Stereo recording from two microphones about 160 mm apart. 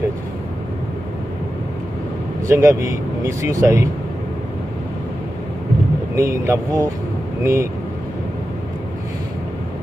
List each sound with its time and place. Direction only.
2.5 s speech: 20° right (ahead or behind)
6.1 s speech: 20° right (ahead or behind)